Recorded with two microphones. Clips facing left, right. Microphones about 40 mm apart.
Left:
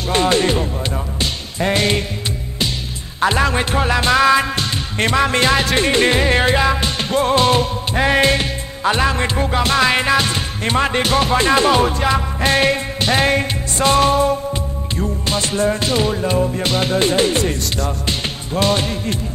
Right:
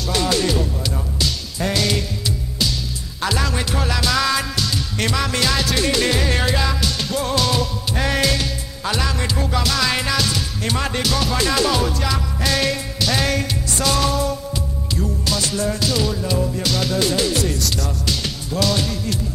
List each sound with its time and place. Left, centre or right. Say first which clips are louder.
0.1 s speech: left 4 dB; left
1.2 s music: left 3 dB; left
3.2 s music: left 6 dB; left